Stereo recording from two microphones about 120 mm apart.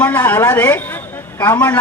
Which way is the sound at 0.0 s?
15° left (ahead or behind).